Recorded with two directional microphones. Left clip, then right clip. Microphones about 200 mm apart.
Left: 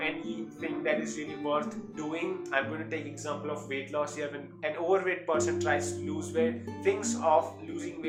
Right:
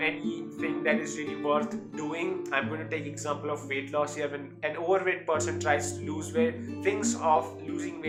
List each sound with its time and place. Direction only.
0.6 s music: 20° right (ahead or behind)
2.1 s speech: 25° right (ahead or behind)